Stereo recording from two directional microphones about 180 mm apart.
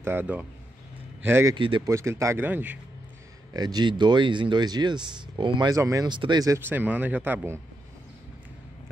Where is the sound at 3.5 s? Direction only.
20° right (ahead or behind).